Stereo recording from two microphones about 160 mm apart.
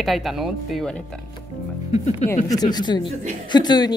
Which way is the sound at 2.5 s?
25° left (ahead or behind).